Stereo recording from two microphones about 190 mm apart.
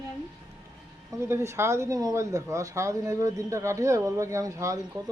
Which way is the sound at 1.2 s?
15° right (ahead or behind).